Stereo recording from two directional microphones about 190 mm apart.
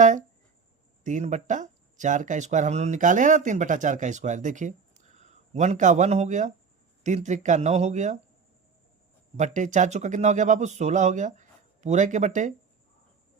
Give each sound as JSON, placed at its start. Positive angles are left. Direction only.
{"t": 0.0, "sound": "a sound", "side_deg": -40}
{"t": 1.0, "sound": "speech", "side_deg": -40}
{"t": 9.4, "sound": "speech", "side_deg": -40}